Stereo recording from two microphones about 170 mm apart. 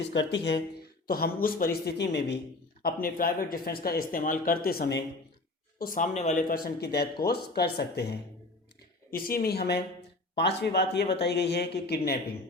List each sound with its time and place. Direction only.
0.0 s speech: 90° left
1.0 s speech: 60° left (ahead or behind); by 2.4 s 90° left
2.8 s speech: 60° left (ahead or behind); by 5.0 s 75° left (ahead or behind)
5.8 s speech: 50° left (ahead or behind); by 8.2 s 70° left (ahead or behind)
9.0 s speech: 60° left (ahead or behind)